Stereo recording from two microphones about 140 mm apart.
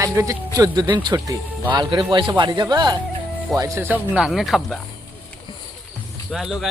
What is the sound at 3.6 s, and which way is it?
Speech, 20° right (ahead or behind).